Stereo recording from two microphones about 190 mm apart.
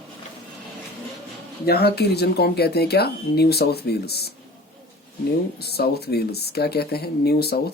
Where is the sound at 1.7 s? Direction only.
55° left (ahead or behind).